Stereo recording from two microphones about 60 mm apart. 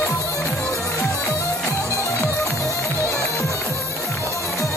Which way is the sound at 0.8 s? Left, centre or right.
Left.